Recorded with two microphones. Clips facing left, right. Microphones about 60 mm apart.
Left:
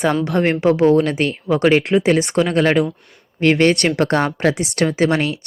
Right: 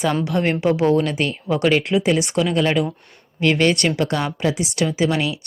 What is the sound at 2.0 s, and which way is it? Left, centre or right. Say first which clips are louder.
Speech: left 3 dB; left.